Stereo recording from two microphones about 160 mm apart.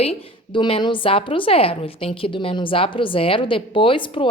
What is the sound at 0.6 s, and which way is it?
Speech, 30° left (ahead or behind).